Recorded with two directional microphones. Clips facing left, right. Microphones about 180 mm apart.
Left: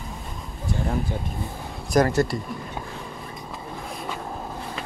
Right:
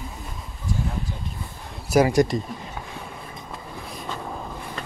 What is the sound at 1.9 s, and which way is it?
Speech, 10° right (ahead or behind).